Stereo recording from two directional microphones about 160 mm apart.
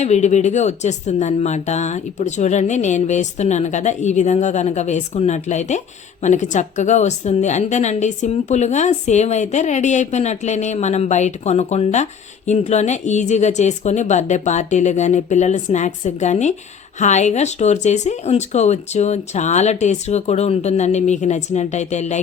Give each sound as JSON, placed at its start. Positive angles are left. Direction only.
{"t": 0.0, "sound": "a woman's voice", "side_deg": 45}